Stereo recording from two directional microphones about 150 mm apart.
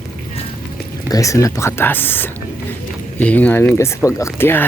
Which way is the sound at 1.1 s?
20° left (ahead or behind).